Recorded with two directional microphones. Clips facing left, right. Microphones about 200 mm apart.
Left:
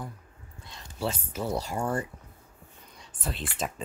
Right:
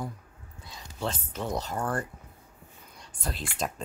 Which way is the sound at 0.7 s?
Centre (ahead or behind).